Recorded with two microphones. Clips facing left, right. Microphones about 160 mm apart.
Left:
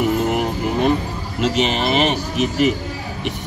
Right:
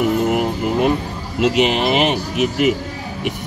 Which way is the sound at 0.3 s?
5° right (ahead or behind).